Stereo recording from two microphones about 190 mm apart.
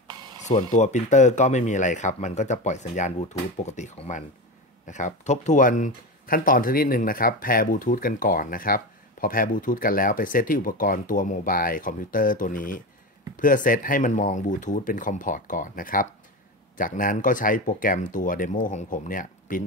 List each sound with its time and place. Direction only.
0.5 s speech: 40° left (ahead or behind)